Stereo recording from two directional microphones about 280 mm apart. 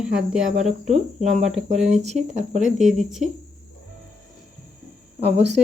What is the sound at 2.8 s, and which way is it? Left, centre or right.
Cricket, centre.